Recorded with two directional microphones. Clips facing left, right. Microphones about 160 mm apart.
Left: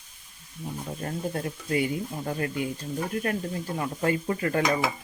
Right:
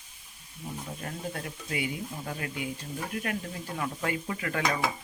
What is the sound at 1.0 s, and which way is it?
Speech, 40° left (ahead or behind).